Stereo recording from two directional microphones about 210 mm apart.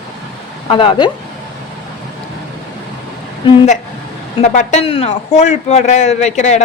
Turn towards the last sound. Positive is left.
turn(degrees=35)  # may be behind; listen again after turning